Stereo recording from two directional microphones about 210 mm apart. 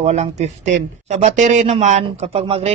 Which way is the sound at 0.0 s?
30° right (ahead or behind).